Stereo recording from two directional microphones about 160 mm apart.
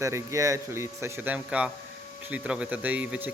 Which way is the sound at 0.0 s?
20° right (ahead or behind).